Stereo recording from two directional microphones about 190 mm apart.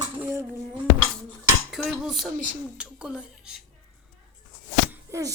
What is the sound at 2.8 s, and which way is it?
Speech, 5° right (ahead or behind).